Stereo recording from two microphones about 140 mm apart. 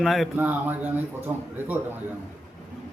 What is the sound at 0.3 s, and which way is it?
Speech, 15° right (ahead or behind).